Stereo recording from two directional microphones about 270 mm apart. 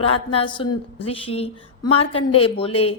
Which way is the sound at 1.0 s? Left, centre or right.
Left.